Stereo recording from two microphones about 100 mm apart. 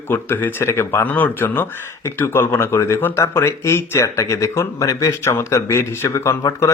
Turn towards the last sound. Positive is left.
turn(degrees=35)  # may be behind; listen again after turning